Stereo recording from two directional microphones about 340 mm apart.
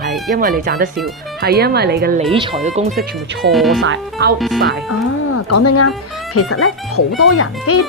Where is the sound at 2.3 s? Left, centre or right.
Centre.